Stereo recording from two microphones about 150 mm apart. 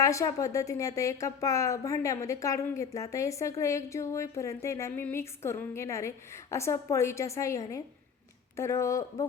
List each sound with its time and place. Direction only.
0.0 s a woman's voice: 20° left (ahead or behind)